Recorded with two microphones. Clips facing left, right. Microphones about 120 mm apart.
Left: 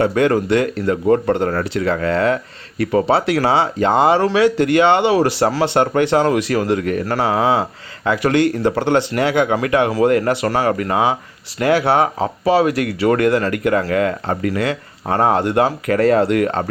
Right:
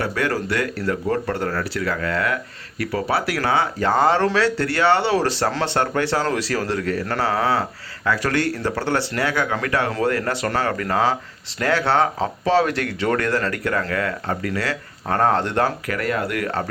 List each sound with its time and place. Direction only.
0.0 s speech: 20° left (ahead or behind)
15.9 s speech: 30° left (ahead or behind)